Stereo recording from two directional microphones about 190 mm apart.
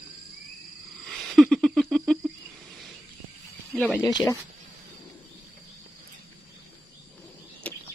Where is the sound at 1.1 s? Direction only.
Centre (ahead or behind).